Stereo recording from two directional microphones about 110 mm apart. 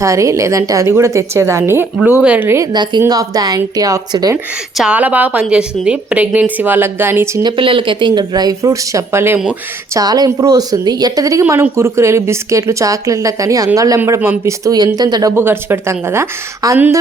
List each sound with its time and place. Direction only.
0.0 s a woman's voice: 30° right (ahead or behind)
2.2 s a woman's voice: 10° right (ahead or behind)
3.1 s speech: 35° right (ahead or behind)
4.8 s a woman's voice: 10° right (ahead or behind)
7.4 s speech: 50° right (ahead or behind); by 9.4 s 20° right (ahead or behind)
9.9 s a woman's voice: 35° right (ahead or behind)
15.4 s a woman's voice: 20° right (ahead or behind)
16.6 s speech: 35° right (ahead or behind)